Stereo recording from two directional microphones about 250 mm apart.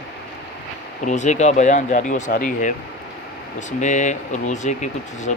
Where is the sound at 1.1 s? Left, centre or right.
Left.